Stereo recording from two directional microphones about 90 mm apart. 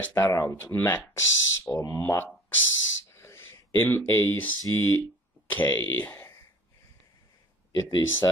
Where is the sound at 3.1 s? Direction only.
30° left (ahead or behind).